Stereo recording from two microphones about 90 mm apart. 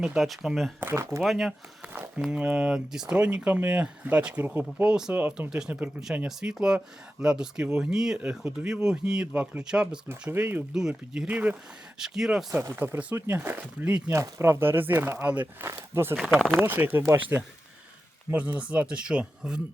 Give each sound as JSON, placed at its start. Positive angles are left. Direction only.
{"t": 0.0, "sound": "speech", "side_deg": -5}
{"t": 0.8, "sound": "speech", "side_deg": -30}
{"t": 1.2, "sound": "speech", "side_deg": 0}
{"t": 1.8, "sound": "speech", "side_deg": -15}
{"t": 4.9, "sound": "speech", "side_deg": -5}
{"t": 10.1, "sound": "speech", "side_deg": -20}
{"t": 10.8, "sound": "speech", "side_deg": -5}
{"t": 11.3, "sound": "speech", "side_deg": -15}
{"t": 11.9, "sound": "speech", "side_deg": -5}
{"t": 12.5, "sound": "speech", "side_deg": -25}
{"t": 14.1, "sound": "speech", "side_deg": -30}
{"t": 18.3, "sound": "speech", "side_deg": -15}